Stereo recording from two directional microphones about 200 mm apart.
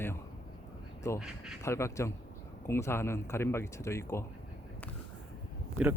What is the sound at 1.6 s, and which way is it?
A man's voice, 15° left (ahead or behind).